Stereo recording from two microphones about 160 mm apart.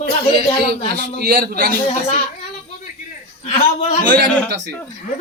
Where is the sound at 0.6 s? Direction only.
85° right.